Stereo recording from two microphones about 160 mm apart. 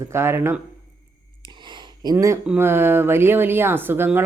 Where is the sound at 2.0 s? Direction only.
20° right (ahead or behind).